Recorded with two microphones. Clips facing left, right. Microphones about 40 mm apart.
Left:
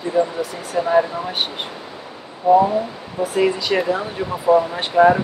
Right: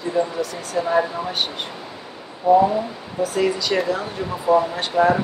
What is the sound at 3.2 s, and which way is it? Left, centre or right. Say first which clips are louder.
Speech: left 2 dB; left.